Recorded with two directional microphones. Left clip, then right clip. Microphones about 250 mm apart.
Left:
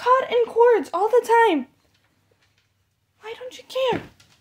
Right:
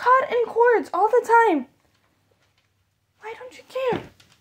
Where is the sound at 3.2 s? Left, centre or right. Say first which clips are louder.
Left 1 dB; centre.